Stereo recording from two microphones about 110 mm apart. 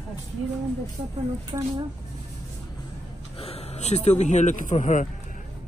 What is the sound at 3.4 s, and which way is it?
Speech, 80° left.